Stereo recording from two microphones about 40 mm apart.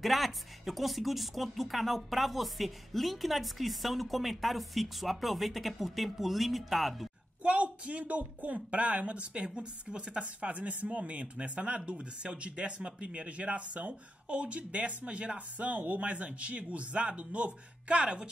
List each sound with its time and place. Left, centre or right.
0.0 s speech: centre
7.4 s speech: right